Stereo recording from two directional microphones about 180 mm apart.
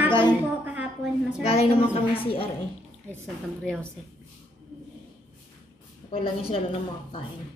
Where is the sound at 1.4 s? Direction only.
35° left (ahead or behind).